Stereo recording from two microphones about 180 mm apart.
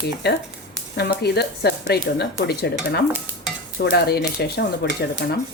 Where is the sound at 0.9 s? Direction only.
65° left (ahead or behind).